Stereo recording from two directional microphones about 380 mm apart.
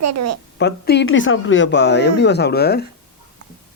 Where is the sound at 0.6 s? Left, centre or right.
Left.